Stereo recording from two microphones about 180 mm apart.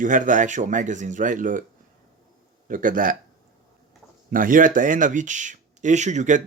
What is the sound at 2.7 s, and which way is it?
Speech, 50° right (ahead or behind).